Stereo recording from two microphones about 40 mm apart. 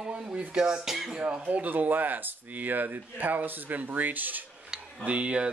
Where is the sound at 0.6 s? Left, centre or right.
Centre.